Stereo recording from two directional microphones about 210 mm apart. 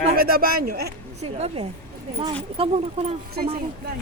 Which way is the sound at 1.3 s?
30° right (ahead or behind).